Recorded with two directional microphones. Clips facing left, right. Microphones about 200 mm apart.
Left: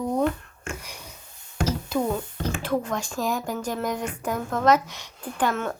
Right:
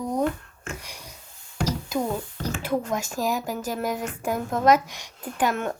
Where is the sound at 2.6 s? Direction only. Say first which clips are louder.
Right 1 dB; 10° right (ahead or behind).